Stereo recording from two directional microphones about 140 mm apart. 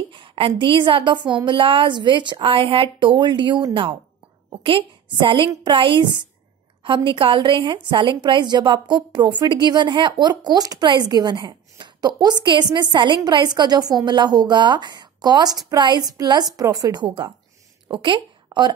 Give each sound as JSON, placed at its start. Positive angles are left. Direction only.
{"t": 0.1, "sound": "a woman's voice", "side_deg": -40}